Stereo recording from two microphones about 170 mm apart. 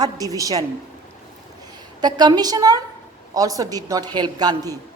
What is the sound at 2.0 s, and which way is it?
A woman's voice, 25° right (ahead or behind).